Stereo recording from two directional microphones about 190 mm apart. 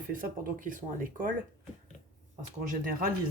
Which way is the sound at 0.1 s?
45° right (ahead or behind).